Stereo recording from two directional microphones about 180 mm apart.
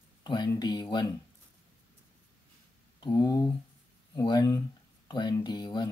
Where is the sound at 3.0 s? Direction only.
25° left (ahead or behind).